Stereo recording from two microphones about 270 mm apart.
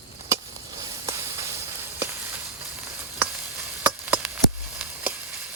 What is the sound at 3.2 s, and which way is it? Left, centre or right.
Sizzle, centre.